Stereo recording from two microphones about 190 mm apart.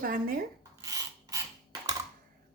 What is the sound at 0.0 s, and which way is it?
Speech, 45° right (ahead or behind).